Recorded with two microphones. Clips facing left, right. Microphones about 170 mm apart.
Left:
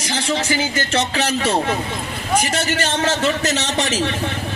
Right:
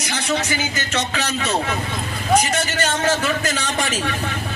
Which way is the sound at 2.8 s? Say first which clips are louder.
Right 1 dB; 25° left (ahead or behind).